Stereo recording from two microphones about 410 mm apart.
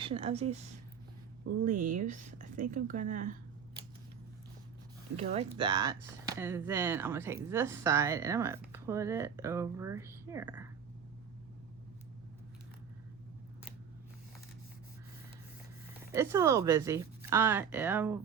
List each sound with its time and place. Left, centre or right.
0.0 s speech: centre
1.6 s a woman's voice: centre
5.1 s speech: centre
16.1 s speech: centre